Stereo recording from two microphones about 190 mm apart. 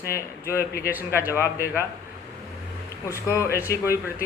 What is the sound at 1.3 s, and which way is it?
Speech, 15° left (ahead or behind).